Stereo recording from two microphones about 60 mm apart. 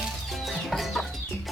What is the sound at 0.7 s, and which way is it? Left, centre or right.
Chicken, centre.